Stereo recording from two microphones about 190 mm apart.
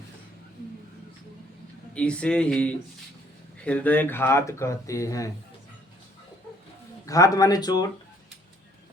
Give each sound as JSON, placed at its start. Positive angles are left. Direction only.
{"t": 2.0, "sound": "speech", "side_deg": 5}
{"t": 7.0, "sound": "speech", "side_deg": 20}